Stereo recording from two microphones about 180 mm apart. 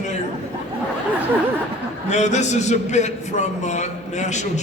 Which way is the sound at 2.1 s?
40° left (ahead or behind).